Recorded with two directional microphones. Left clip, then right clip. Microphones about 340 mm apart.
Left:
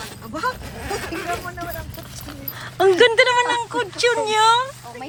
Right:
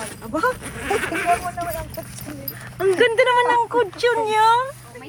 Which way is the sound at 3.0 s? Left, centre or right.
Centre.